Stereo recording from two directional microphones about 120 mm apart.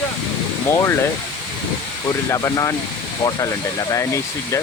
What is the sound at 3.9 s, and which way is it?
Speech, 25° left (ahead or behind).